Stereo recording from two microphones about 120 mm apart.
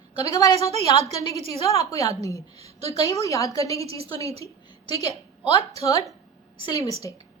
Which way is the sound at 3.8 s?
55° right (ahead or behind).